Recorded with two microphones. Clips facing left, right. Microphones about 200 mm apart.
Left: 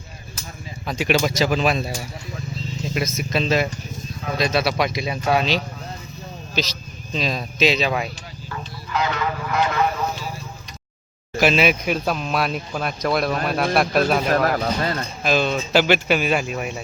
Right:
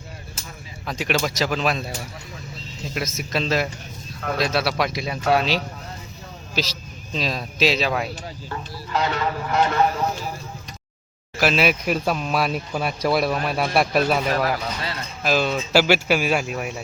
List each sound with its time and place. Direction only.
0.9 s speech: centre (ahead or behind)
3.2 s speech: centre (ahead or behind)
7.1 s speech: centre (ahead or behind)
8.4 s a sound: 35° right (ahead or behind)
11.3 s speech: centre (ahead or behind)
14.3 s speech: 45° left (ahead or behind)
15.2 s speech: 5° right (ahead or behind)